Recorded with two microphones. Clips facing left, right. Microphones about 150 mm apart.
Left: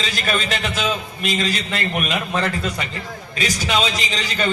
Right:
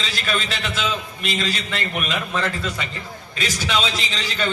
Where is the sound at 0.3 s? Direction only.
45° left (ahead or behind).